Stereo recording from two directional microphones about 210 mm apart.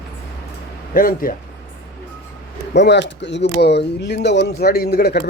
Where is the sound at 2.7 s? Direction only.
55° left (ahead or behind).